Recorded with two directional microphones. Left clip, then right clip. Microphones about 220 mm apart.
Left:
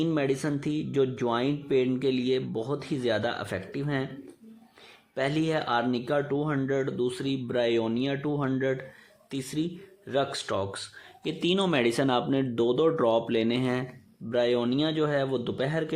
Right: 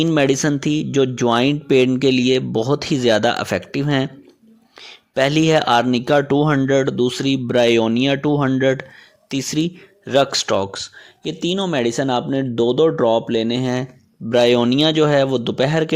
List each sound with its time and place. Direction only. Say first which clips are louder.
0.0 s speech: right 11 dB; 40° right (ahead or behind)
5.1 s speech: right 12 dB; 40° right (ahead or behind)